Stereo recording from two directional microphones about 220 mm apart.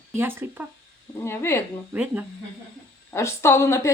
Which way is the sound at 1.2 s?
10° left (ahead or behind).